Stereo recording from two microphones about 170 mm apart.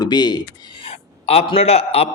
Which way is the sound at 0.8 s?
35° left (ahead or behind).